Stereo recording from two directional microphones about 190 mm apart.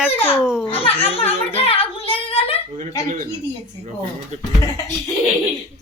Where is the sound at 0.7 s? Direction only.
30° left (ahead or behind).